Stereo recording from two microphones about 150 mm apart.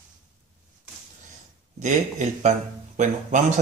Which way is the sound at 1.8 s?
55° right (ahead or behind).